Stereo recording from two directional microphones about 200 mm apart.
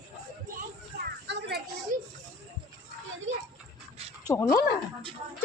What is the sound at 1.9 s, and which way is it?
Children playing, 45° right (ahead or behind).